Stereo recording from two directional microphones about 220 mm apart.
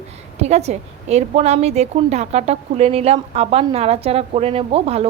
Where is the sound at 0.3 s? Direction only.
30° right (ahead or behind).